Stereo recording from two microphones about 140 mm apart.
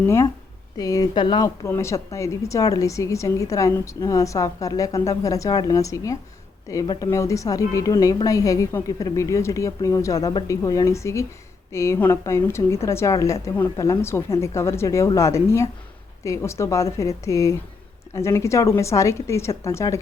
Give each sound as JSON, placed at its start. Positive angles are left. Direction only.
{"t": 0.0, "sound": "a woman's voice", "side_deg": 20}
{"t": 1.6, "sound": "a woman's voice", "side_deg": 20}